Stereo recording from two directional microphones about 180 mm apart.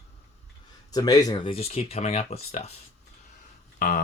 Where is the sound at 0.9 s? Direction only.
20° left (ahead or behind); by 2.7 s 35° left (ahead or behind).